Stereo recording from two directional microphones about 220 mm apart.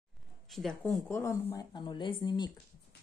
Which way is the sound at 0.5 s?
Centre (ahead or behind).